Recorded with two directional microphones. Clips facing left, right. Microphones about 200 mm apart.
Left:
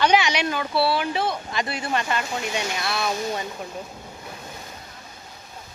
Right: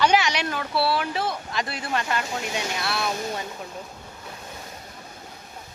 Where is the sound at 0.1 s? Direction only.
Centre (ahead or behind).